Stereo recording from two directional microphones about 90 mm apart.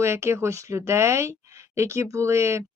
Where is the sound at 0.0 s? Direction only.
30° right (ahead or behind).